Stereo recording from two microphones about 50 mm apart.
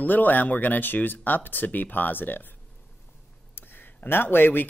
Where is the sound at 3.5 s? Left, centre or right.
Left.